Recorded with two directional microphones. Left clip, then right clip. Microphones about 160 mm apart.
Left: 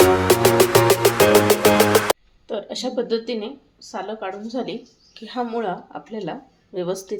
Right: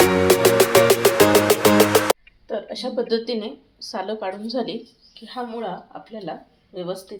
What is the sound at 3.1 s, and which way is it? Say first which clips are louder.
Speech: right 1 dB; 5° left (ahead or behind).